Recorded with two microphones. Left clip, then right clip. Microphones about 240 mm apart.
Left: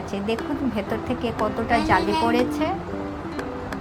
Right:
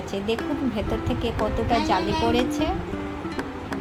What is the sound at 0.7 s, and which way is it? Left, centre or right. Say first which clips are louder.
Speech: left 1 dB; left.